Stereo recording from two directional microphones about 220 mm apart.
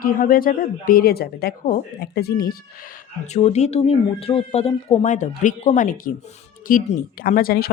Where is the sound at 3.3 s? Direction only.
30° left (ahead or behind).